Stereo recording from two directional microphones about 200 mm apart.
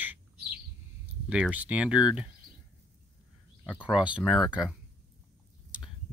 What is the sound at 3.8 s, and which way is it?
Speech, 5° right (ahead or behind).